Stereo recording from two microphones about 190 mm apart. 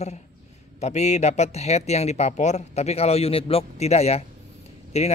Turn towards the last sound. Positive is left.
turn(degrees=35)  # may be behind; listen again after turning